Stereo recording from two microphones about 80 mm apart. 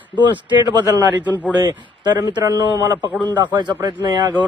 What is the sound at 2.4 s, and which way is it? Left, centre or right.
Speech, right.